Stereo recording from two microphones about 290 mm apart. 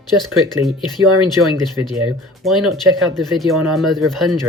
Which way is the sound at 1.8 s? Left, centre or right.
Right.